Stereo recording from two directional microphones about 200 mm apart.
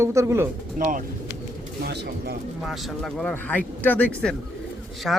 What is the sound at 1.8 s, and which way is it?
Speech, 55° right (ahead or behind).